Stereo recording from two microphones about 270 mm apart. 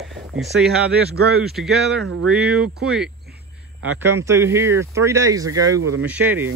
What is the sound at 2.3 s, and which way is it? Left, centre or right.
Speech, centre.